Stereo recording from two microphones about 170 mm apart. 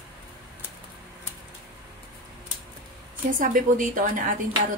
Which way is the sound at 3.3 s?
50° right (ahead or behind).